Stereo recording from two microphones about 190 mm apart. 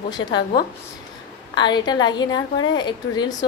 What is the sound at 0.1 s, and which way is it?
Speech, 25° left (ahead or behind).